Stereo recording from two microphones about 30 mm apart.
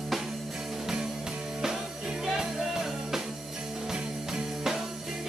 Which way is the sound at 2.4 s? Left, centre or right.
Centre.